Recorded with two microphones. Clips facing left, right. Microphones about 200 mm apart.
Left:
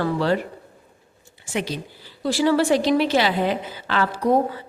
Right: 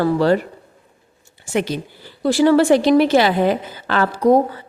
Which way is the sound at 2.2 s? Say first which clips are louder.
Right 6 dB; 55° right (ahead or behind).